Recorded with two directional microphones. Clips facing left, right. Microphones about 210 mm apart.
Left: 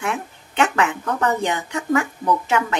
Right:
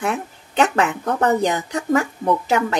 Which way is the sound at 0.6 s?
35° right (ahead or behind).